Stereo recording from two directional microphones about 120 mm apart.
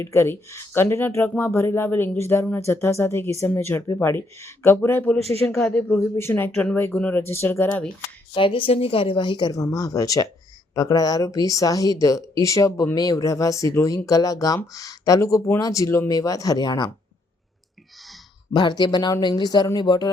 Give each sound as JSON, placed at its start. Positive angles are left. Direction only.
{"t": 0.0, "sound": "speech", "side_deg": 20}
{"t": 6.0, "sound": "speech", "side_deg": 20}
{"t": 8.4, "sound": "speech", "side_deg": 45}
{"t": 18.5, "sound": "speech", "side_deg": 35}